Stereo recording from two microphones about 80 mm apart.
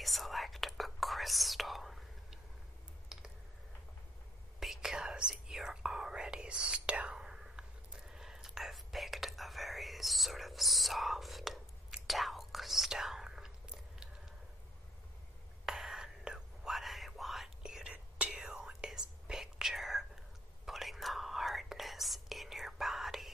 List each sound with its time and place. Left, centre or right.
0.0 s whispering: centre
3.1 s a sound: centre
4.6 s whispering: centre
15.6 s whispering: centre
18.3 s whispering: centre